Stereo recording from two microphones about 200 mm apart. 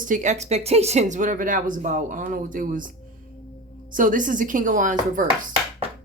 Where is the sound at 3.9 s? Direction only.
40° right (ahead or behind).